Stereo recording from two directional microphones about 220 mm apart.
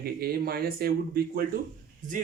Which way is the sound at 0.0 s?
45° right (ahead or behind).